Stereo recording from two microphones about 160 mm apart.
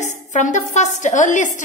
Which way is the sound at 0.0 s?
50° left (ahead or behind).